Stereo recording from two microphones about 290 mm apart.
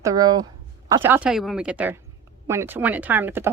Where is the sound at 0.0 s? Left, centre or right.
Centre.